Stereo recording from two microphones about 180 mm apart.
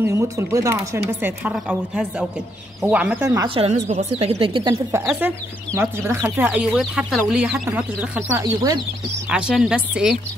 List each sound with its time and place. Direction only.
0.0 s a woman's voice: 15° right (ahead or behind)
3.4 s speech: 30° right (ahead or behind)
4.9 s a woman's voice: 10° right (ahead or behind)
9.3 s speech: 5° right (ahead or behind)